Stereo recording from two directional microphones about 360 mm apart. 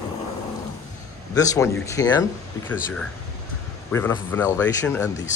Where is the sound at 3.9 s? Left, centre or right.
Centre.